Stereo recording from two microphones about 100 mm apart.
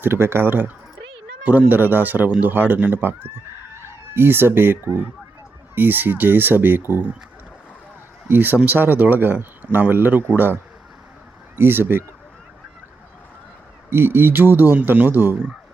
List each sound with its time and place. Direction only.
0.0 s speech: 25° right (ahead or behind)
8.3 s speech: 20° right (ahead or behind)
13.9 s speech: 25° right (ahead or behind)